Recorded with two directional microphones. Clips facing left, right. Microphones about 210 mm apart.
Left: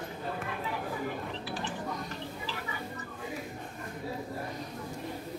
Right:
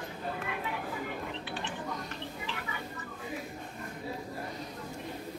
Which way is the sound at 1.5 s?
35° left (ahead or behind).